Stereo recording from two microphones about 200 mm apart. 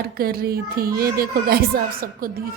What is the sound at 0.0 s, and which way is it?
A woman's voice, 50° right (ahead or behind).